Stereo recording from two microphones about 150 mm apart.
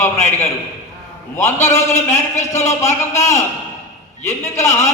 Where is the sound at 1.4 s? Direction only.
20° left (ahead or behind).